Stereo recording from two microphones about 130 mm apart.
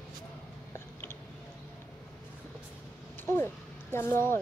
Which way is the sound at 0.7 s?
20° left (ahead or behind).